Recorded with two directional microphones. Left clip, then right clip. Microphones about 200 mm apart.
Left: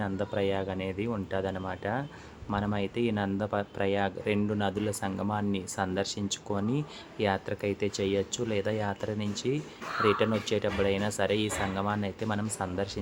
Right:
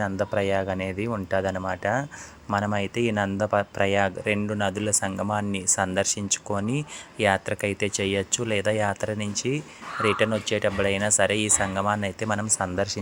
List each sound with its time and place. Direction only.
0.0 s speech: 20° right (ahead or behind)